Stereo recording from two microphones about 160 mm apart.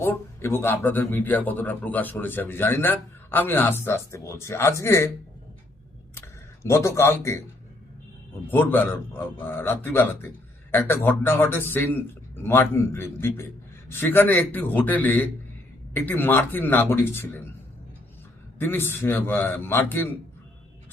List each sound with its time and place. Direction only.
0.0 s speech: 15° left (ahead or behind)
6.1 s tick-tock: 15° left (ahead or behind)
8.4 s speech: 10° left (ahead or behind)
18.6 s speech: 15° left (ahead or behind)